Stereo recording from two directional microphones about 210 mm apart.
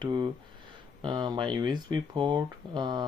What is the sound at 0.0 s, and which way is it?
Speech, 20° right (ahead or behind).